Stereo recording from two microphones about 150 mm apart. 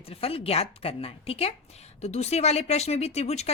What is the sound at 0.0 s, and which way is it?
A woman's voice, 40° left (ahead or behind).